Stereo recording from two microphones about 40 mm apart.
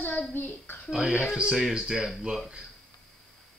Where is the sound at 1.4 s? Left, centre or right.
Centre.